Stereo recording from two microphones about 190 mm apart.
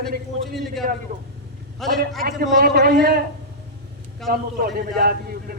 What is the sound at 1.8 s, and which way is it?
Speech, centre (ahead or behind).